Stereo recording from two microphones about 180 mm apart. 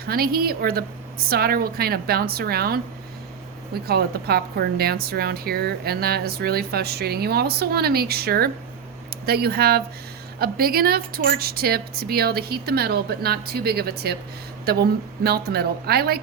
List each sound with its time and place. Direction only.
0.0 s a woman's voice: 55° right (ahead or behind)
3.8 s a woman's voice: 60° right (ahead or behind)